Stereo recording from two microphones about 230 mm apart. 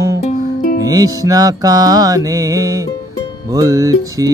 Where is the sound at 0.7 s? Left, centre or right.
Centre.